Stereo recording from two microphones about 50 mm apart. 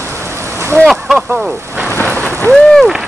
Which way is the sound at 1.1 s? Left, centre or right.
Centre.